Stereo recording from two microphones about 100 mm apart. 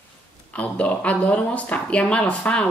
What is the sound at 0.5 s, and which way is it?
Speech, 15° left (ahead or behind).